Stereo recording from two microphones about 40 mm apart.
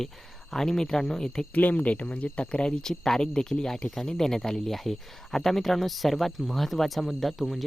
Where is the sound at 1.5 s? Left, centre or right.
Left.